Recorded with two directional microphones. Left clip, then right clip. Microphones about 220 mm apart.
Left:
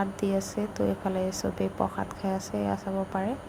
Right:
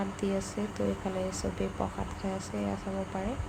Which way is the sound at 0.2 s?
20° left (ahead or behind).